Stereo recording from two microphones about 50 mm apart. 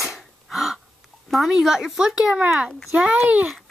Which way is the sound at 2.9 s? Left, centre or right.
Right.